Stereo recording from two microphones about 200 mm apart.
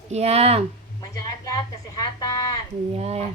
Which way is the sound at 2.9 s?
30° right (ahead or behind).